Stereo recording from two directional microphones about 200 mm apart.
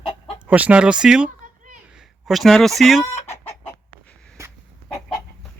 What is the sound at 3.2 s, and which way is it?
Chicken, 15° left (ahead or behind).